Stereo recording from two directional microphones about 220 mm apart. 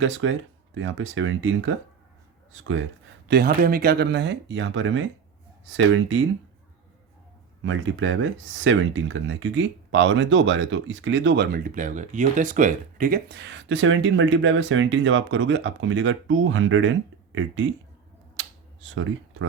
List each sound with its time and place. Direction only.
0.0 s speech: 60° right (ahead or behind)
3.2 s speech: 45° right (ahead or behind); by 6.2 s 60° right (ahead or behind)
7.6 s speech: 60° right (ahead or behind)
18.3 s finger snapping: 60° right (ahead or behind)